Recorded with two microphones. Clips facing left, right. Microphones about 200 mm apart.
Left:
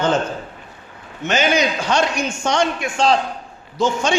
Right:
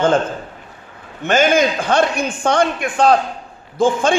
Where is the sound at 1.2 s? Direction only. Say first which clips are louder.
Right 4 dB; 50° right (ahead or behind).